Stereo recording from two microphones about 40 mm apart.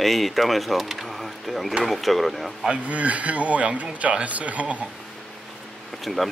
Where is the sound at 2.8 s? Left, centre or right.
Right.